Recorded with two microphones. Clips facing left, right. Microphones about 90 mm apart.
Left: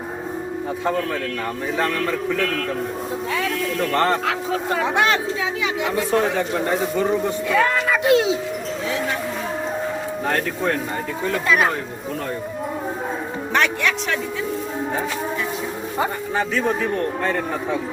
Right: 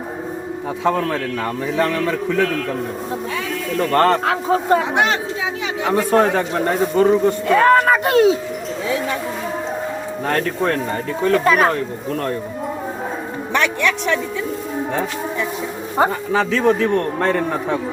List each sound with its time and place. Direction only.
3.9 s speech: 65° right (ahead or behind)
4.3 s speech: 40° right (ahead or behind)
5.8 s speech: 55° right (ahead or behind)
10.2 s speech: 60° right (ahead or behind)
11.3 s speech: 45° right (ahead or behind)
16.0 s a man's voice: 90° right; by 17.7 s 65° right (ahead or behind)